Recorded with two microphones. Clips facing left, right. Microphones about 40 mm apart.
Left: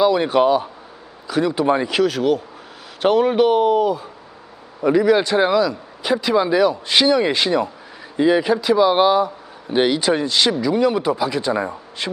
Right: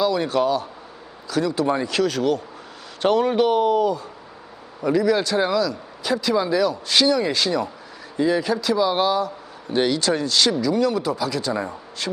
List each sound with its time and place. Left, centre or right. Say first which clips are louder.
0.0 s speech: left 5 dB; left
1.9 s a man's voice: left 3 dB; centre